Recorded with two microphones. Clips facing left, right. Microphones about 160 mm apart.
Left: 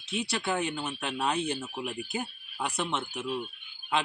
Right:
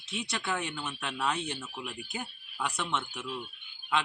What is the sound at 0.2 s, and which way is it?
Speech, 30° left (ahead or behind).